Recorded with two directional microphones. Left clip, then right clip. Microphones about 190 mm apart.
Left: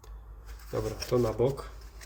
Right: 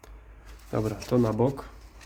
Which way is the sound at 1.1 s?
90° right.